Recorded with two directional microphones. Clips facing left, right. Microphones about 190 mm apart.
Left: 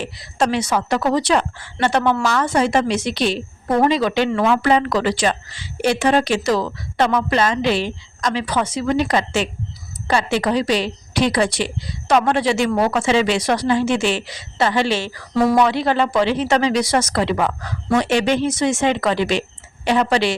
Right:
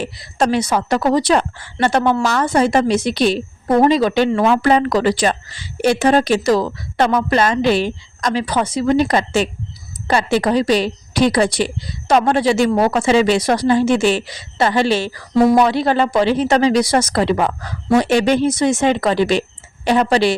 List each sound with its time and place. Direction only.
0.0 s speech: 40° right (ahead or behind)